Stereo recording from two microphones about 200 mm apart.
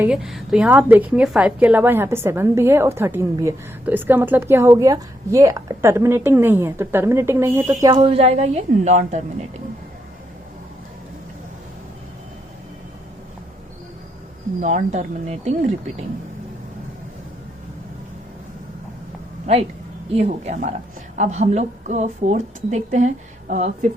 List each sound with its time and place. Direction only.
0.0 s a woman's voice: 5° right (ahead or behind); by 9.2 s 35° right (ahead or behind)
14.6 s speech: 35° right (ahead or behind)
20.1 s speech: 35° right (ahead or behind)